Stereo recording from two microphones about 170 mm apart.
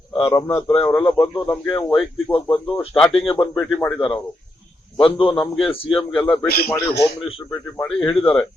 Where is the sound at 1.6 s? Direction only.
30° left (ahead or behind).